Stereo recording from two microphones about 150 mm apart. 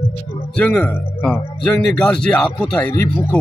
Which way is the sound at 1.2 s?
5° left (ahead or behind).